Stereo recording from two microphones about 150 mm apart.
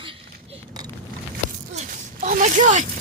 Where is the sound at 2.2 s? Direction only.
70° right (ahead or behind).